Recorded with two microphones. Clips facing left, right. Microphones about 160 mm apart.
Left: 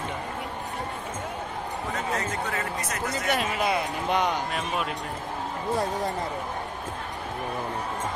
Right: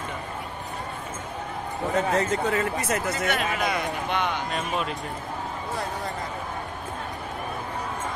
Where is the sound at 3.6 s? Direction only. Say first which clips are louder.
Left 1 dB; 30° left (ahead or behind).